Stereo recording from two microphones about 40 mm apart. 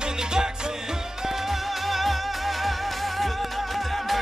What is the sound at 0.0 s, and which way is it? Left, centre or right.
Music, centre.